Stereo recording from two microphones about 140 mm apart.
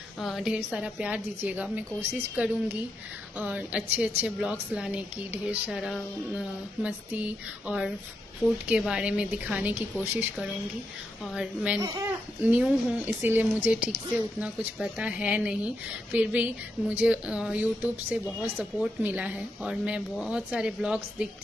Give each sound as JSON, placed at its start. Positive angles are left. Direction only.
{"t": 0.2, "sound": "a woman's voice", "side_deg": -5}
{"t": 11.3, "sound": "a woman's voice", "side_deg": -5}
{"t": 11.8, "sound": "speech", "side_deg": -25}
{"t": 12.4, "sound": "a woman's voice", "side_deg": -10}